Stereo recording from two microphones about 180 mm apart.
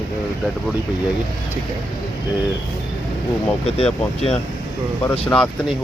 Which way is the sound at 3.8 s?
35° left (ahead or behind).